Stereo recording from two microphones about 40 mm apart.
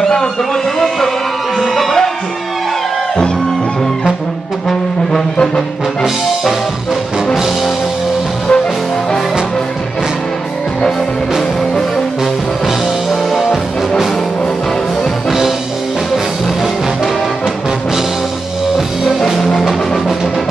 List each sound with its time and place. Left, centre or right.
0.0 s a sound: centre
1.6 s speech: centre
4.6 s brass instrument: centre
7.3 s music: centre
12.6 s music: centre